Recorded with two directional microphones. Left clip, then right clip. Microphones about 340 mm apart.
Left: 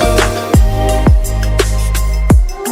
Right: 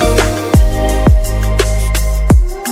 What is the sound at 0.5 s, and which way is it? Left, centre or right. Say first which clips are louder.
Music: even; centre.